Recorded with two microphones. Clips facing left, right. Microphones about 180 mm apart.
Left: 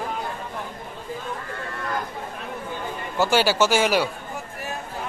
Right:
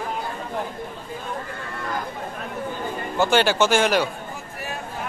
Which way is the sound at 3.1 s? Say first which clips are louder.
Right 1 dB; 5° left (ahead or behind).